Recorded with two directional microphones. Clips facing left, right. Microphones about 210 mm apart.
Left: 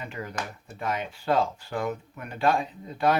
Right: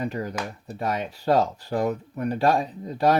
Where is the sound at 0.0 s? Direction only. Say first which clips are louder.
Right 6 dB; 35° right (ahead or behind).